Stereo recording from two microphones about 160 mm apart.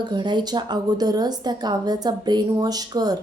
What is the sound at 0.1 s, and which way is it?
A woman's voice, 30° right (ahead or behind).